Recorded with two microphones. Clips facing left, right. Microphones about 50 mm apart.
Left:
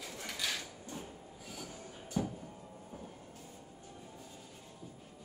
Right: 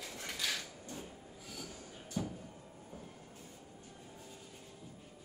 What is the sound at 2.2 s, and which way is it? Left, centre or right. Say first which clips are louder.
Music: left 3 dB; centre.